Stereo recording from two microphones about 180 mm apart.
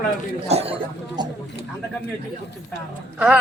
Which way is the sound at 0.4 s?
35° right (ahead or behind).